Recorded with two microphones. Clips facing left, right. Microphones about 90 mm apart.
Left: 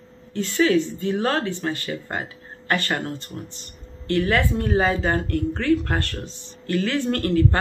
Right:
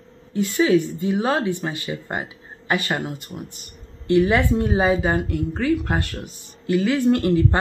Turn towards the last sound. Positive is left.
turn(degrees=-15)  # may be behind; listen again after turning